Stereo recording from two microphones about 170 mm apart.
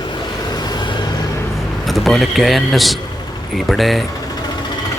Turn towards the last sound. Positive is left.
turn(degrees=0)  # may be behind; listen again after turning